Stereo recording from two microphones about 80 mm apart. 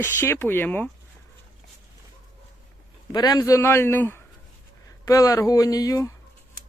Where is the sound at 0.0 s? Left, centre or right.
Left.